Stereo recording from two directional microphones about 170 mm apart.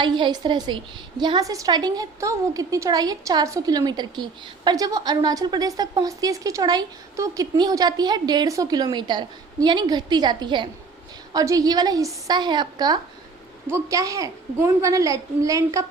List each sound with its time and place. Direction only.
0.0 s a woman's voice: 25° right (ahead or behind)